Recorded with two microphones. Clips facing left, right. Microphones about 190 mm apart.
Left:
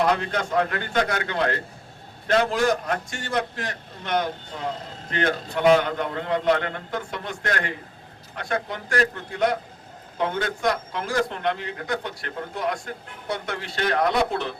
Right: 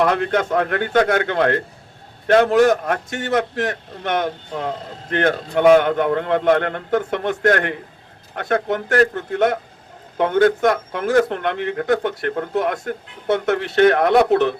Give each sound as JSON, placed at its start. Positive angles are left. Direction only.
{"t": 0.0, "sound": "a man's voice", "side_deg": -55}